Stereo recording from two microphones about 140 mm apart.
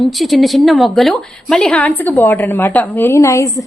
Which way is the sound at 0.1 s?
Centre (ahead or behind).